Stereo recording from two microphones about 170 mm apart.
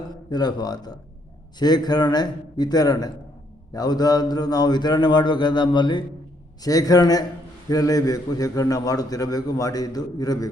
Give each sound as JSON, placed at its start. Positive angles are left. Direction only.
{"t": 0.3, "sound": "a man's voice", "side_deg": 25}